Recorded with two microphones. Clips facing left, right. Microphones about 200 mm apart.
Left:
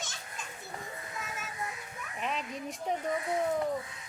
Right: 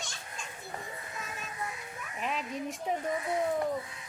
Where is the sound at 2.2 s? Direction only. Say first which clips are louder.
Right 1 dB; centre (ahead or behind).